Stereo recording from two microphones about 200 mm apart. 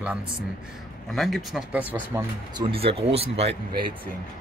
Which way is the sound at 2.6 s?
30° right (ahead or behind).